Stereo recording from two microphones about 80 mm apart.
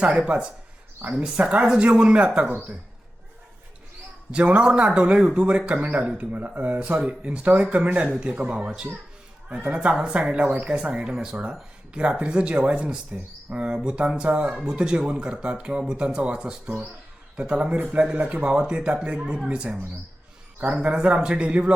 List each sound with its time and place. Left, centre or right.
0.0 s a man's voice: centre
4.3 s a man's voice: centre
10.7 s a man's voice: centre
20.8 s a man's voice: centre